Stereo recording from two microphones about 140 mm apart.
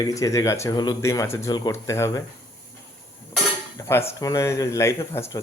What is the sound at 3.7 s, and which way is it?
Speech, 15° left (ahead or behind).